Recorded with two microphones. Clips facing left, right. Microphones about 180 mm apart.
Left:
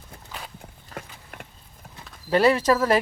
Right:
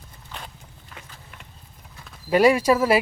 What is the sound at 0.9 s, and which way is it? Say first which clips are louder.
Clip-clop: left 6 dB; 50° left (ahead or behind).